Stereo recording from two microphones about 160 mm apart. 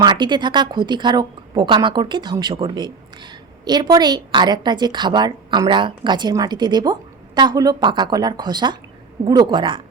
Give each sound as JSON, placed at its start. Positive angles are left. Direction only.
{"t": 0.0, "sound": "a woman's voice", "side_deg": -30}